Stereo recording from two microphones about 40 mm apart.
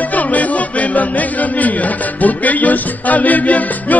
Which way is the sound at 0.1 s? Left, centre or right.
Left.